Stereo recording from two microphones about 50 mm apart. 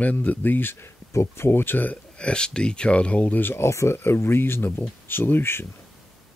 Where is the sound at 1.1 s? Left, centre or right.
Left.